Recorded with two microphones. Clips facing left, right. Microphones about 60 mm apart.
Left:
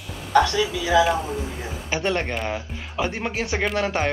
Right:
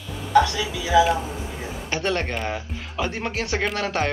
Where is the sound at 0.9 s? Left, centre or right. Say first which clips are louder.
Right 1 dB; centre.